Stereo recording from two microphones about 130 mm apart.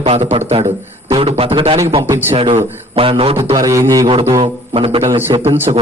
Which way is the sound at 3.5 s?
25° right (ahead or behind).